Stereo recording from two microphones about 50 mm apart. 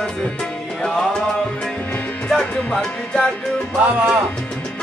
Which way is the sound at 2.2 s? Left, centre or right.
Centre.